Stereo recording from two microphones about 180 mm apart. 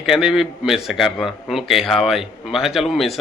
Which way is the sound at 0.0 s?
Centre (ahead or behind).